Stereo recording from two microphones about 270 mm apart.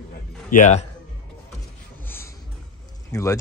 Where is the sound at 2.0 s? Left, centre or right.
Centre.